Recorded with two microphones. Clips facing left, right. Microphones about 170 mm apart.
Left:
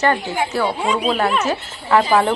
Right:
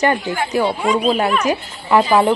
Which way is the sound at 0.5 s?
15° right (ahead or behind).